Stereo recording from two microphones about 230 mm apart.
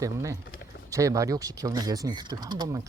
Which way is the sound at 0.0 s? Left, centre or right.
Centre.